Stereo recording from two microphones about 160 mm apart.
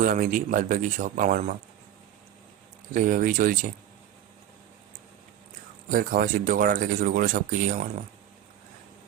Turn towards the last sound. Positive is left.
turn(degrees=-55)  # may be behind; listen again after turning